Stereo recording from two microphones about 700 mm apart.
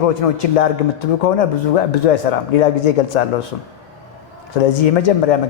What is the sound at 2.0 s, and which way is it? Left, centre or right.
A man's voice, left.